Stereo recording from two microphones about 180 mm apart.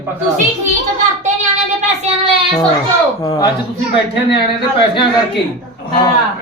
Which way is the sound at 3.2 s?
20° left (ahead or behind).